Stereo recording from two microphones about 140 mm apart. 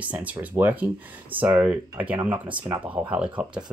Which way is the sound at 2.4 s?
35° right (ahead or behind).